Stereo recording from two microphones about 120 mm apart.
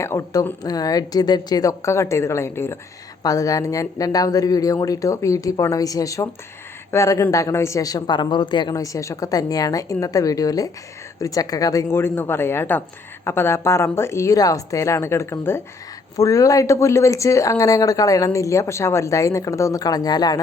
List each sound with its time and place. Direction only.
0.0 s speech: 25° left (ahead or behind); by 8.7 s 40° left (ahead or behind)
8.7 s speech: 25° left (ahead or behind)